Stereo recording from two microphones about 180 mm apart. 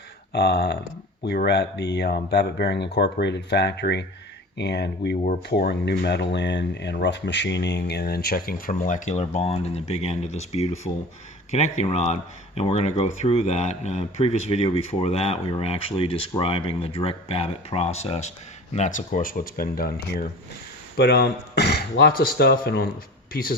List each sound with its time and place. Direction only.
0.3 s speech: 65° left (ahead or behind)